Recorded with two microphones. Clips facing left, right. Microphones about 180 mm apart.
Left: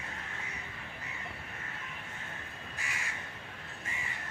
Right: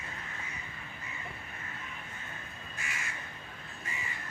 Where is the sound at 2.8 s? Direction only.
35° left (ahead or behind).